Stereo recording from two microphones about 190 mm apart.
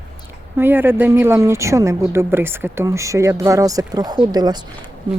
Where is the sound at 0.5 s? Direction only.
10° right (ahead or behind).